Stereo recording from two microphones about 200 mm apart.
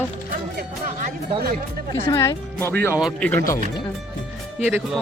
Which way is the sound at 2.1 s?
15° left (ahead or behind).